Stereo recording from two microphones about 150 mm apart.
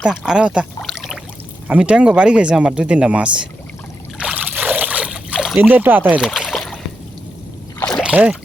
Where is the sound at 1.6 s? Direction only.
10° right (ahead or behind).